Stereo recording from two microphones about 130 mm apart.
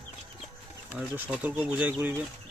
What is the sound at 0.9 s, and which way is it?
Speech, 15° right (ahead or behind).